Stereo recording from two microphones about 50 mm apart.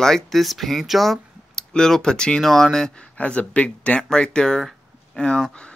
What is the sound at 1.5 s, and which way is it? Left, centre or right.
Speech, centre.